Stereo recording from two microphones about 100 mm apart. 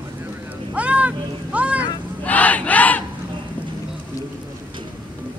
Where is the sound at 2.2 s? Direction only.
15° left (ahead or behind).